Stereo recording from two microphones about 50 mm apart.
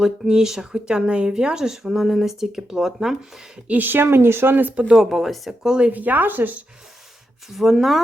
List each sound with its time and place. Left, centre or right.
0.0 s speech: centre
3.7 s speech: right
4.9 s speech: centre
5.6 s speech: centre
5.9 s speech: right
7.5 s speech: centre